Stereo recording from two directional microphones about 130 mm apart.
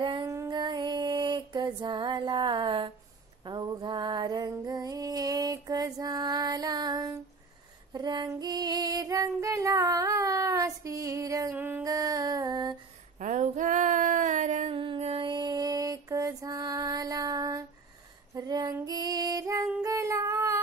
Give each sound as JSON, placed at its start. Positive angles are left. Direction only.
{"t": 0.0, "sound": "child singing", "side_deg": -35}
{"t": 0.5, "sound": "music", "side_deg": -30}
{"t": 3.4, "sound": "female singing", "side_deg": -35}
{"t": 11.5, "sound": "music", "side_deg": -15}
{"t": 11.8, "sound": "a sound", "side_deg": -30}
{"t": 13.2, "sound": "female singing", "side_deg": -75}
{"t": 14.7, "sound": "mantra", "side_deg": -40}
{"t": 18.3, "sound": "female singing", "side_deg": -30}
{"t": 19.8, "sound": "singing", "side_deg": -25}